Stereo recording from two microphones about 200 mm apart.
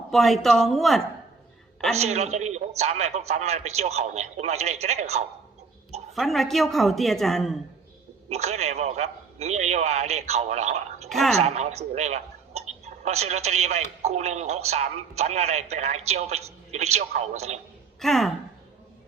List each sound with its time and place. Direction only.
0.1 s a woman's voice: centre (ahead or behind)
2.0 s a woman's voice: 35° right (ahead or behind)
6.1 s a woman's voice: centre (ahead or behind)
8.3 s a woman's voice: 35° right (ahead or behind)
11.1 s a woman's voice: centre (ahead or behind)
11.3 s a woman's voice: 35° right (ahead or behind)
18.0 s a woman's voice: centre (ahead or behind)